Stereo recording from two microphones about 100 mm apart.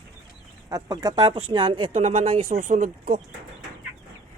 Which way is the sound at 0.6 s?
35° right (ahead or behind).